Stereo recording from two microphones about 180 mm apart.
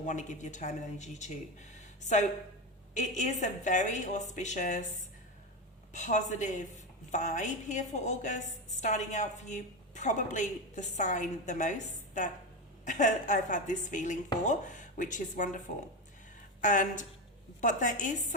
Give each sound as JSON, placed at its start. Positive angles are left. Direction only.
{"t": 0.0, "sound": "a woman's voice", "side_deg": 45}
{"t": 5.9, "sound": "a woman's voice", "side_deg": 40}